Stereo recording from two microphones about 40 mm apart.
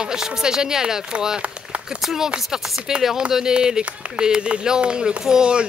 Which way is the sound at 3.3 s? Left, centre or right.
Centre.